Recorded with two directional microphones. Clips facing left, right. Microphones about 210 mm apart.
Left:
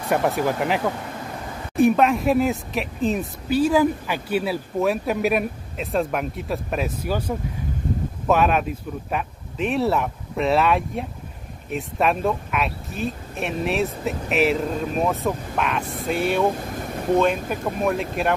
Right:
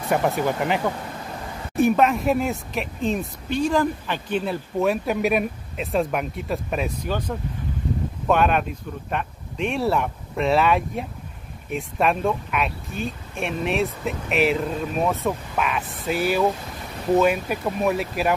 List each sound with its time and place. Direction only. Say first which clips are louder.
0.1 s speech: left 1 dB; centre (ahead or behind)